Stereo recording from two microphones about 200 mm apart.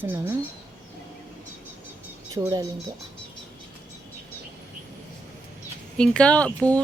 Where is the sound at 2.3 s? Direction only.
20° right (ahead or behind).